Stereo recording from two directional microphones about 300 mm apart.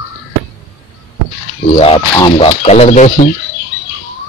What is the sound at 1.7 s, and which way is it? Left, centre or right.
Speech, centre.